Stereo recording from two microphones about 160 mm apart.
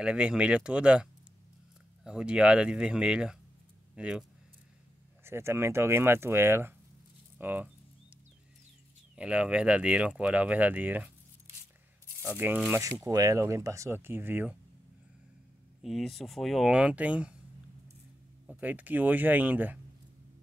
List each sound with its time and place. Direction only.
0.0 s speech: 5° right (ahead or behind)
2.0 s speech: 5° right (ahead or behind)
9.1 s speech: 5° right (ahead or behind)
12.2 s speech: 15° right (ahead or behind)
12.8 s speech: 20° right (ahead or behind)
15.8 s speech: centre (ahead or behind)
18.5 s speech: 10° right (ahead or behind)